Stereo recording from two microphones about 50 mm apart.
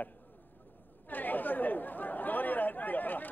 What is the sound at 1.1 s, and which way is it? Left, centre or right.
Speech, left.